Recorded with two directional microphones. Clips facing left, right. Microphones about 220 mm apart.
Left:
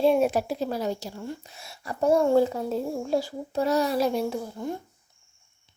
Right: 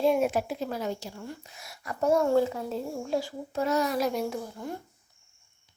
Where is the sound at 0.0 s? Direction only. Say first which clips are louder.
Left 3 dB; 30° left (ahead or behind).